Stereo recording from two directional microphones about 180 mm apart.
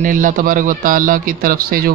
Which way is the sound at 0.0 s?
45° right (ahead or behind).